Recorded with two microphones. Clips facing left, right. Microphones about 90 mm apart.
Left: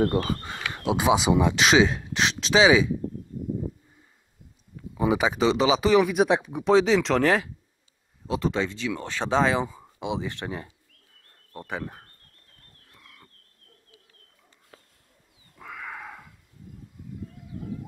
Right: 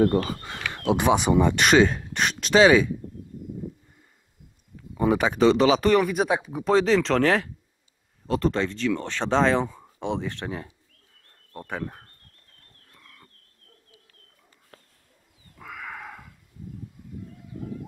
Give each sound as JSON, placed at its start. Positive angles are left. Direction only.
{"t": 0.0, "sound": "speech", "side_deg": 15}
{"t": 4.9, "sound": "speech", "side_deg": 5}
{"t": 12.8, "sound": "a sound", "side_deg": 0}
{"t": 15.5, "sound": "cat", "side_deg": 0}